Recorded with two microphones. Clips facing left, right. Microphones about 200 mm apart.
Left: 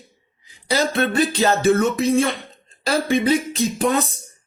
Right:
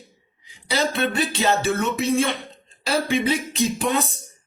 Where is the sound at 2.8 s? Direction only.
45° left (ahead or behind).